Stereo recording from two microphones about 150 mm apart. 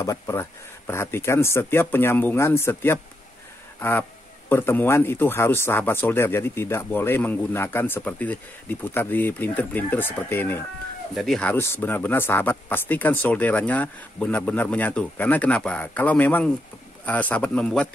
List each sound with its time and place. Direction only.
0.0 s speech: 20° left (ahead or behind)
4.5 s speech: 15° left (ahead or behind)
11.1 s speech: 5° left (ahead or behind)